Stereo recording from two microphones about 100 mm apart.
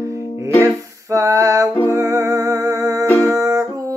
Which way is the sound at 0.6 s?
30° right (ahead or behind).